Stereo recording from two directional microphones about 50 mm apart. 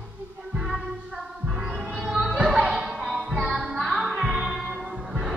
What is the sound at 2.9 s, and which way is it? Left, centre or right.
Music, centre.